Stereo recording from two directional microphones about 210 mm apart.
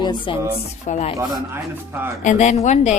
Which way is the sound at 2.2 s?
35° left (ahead or behind).